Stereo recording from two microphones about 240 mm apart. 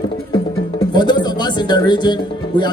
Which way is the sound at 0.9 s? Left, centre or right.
Centre.